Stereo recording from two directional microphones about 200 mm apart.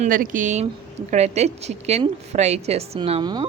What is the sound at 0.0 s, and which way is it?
A woman's voice, 40° right (ahead or behind).